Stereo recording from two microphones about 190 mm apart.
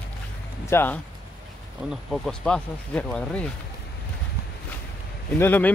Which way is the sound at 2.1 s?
5° left (ahead or behind).